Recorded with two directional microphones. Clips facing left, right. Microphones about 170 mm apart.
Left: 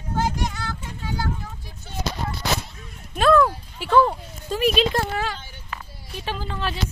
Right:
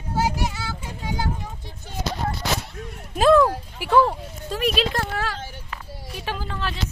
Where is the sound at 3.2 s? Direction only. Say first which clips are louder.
Right 2 dB; 20° right (ahead or behind).